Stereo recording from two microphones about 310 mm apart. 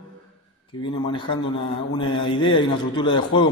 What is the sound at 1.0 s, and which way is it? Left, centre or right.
A man's voice, centre.